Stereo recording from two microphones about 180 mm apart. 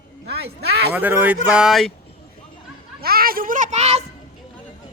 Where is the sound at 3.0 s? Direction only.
55° right (ahead or behind); by 4.0 s 35° right (ahead or behind).